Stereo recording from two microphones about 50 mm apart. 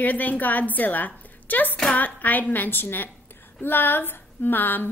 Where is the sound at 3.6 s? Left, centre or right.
Left.